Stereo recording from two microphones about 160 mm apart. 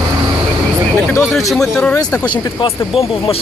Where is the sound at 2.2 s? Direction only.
35° left (ahead or behind).